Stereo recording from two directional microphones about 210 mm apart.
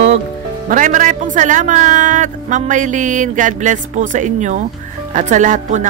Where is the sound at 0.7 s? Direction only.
35° right (ahead or behind).